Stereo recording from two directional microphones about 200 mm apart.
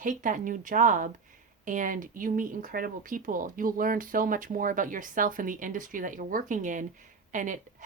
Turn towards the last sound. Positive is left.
turn(degrees=-40)  # may be behind; listen again after turning